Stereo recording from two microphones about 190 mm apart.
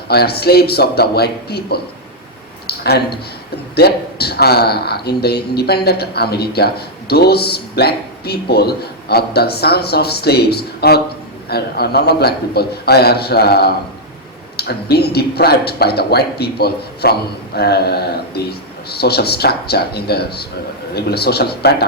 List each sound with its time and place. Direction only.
0.1 s speech: 55° left (ahead or behind)
2.6 s a sound: 55° left (ahead or behind)
3.8 s speech: 55° left (ahead or behind)